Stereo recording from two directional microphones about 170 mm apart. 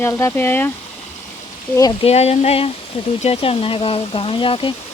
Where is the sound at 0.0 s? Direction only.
15° left (ahead or behind).